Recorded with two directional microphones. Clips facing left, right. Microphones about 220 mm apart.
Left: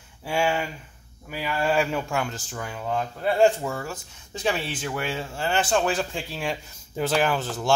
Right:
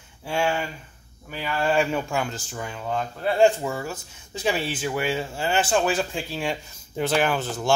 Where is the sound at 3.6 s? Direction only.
5° right (ahead or behind).